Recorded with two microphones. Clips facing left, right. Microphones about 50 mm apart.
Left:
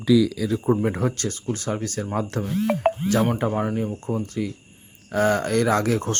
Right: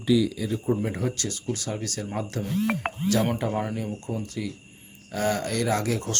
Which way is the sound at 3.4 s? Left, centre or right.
Left.